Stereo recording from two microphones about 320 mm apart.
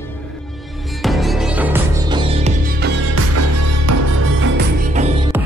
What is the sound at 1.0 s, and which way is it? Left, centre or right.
Music, centre.